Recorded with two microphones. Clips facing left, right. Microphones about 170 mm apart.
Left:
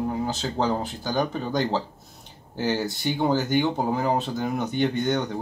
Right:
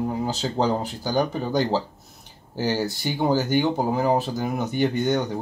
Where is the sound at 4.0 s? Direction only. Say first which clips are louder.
Right 2 dB; 10° right (ahead or behind).